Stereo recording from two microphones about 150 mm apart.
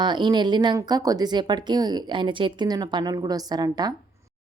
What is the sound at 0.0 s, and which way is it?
Speech, 30° right (ahead or behind).